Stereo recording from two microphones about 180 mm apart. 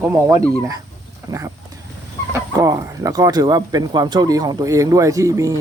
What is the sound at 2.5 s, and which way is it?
Speech, 20° right (ahead or behind).